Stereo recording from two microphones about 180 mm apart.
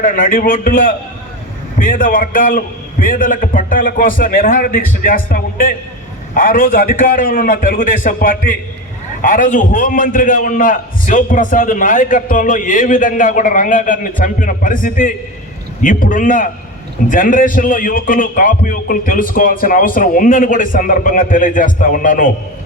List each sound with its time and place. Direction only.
0.0 s a man's voice: 50° left (ahead or behind)